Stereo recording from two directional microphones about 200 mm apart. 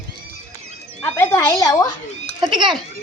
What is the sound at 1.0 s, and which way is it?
Speech, 10° left (ahead or behind).